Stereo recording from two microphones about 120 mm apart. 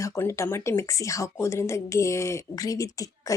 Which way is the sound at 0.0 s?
25° left (ahead or behind).